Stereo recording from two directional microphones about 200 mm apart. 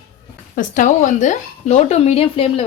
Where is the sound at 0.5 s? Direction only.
40° left (ahead or behind).